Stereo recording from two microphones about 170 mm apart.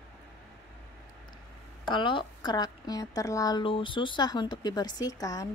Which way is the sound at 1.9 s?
30° left (ahead or behind).